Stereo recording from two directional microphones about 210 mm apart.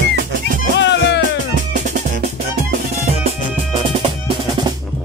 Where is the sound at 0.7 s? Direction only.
55° left (ahead or behind).